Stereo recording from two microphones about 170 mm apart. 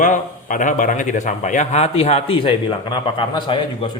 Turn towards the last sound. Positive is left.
turn(degrees=25)  # may be behind; listen again after turning